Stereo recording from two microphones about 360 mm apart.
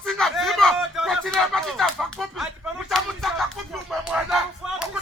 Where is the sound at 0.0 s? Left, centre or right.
Centre.